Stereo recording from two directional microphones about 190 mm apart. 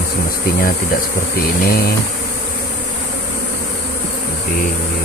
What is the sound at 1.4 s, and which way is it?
Speech, 55° left (ahead or behind).